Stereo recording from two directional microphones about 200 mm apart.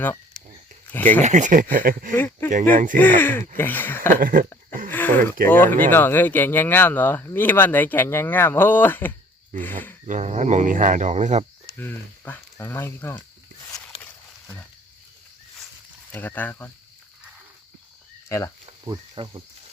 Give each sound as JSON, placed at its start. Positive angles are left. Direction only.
{"t": 1.2, "sound": "speech", "side_deg": -35}
{"t": 2.1, "sound": "speech", "side_deg": 10}
{"t": 2.5, "sound": "speech", "side_deg": -40}
{"t": 3.2, "sound": "speech", "side_deg": 10}
{"t": 4.1, "sound": "speech", "side_deg": -45}
{"t": 4.9, "sound": "a sound", "side_deg": 10}
{"t": 5.5, "sound": "speech", "side_deg": 10}
{"t": 10.1, "sound": "speech", "side_deg": -35}
{"t": 11.8, "sound": "speech", "side_deg": 10}
{"t": 14.0, "sound": "a sound", "side_deg": 5}
{"t": 16.1, "sound": "speech", "side_deg": 10}
{"t": 18.3, "sound": "speech", "side_deg": 15}
{"t": 18.6, "sound": "cricket", "side_deg": -25}